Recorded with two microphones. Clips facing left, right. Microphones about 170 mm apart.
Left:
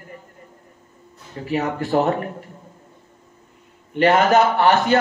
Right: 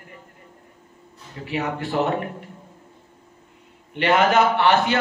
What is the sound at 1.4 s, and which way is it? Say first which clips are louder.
Speech: left 3 dB; 40° left (ahead or behind).